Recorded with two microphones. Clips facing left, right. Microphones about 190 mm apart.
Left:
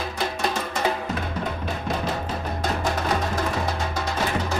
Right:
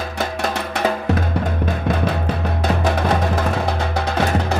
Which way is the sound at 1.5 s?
55° right (ahead or behind).